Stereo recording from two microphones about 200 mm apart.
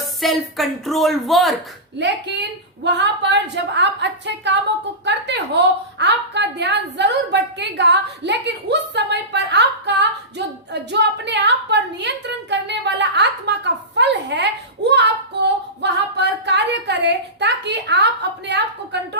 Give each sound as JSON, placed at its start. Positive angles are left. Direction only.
{"t": 0.2, "sound": "speech", "side_deg": 0}
{"t": 2.0, "sound": "a woman's voice", "side_deg": -60}